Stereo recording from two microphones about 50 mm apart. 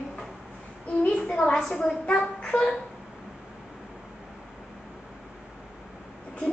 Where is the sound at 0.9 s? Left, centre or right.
Left.